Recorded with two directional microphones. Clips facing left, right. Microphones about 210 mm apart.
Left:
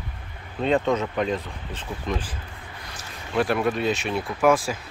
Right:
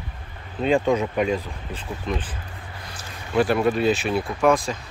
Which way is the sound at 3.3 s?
Centre (ahead or behind).